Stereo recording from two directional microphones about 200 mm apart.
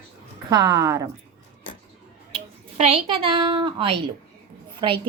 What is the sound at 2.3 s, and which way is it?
A woman's voice, 30° right (ahead or behind).